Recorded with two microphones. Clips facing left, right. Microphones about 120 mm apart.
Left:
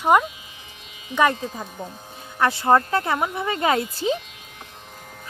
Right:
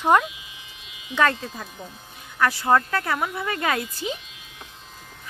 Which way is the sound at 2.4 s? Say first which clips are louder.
Left 2 dB; 25° left (ahead or behind).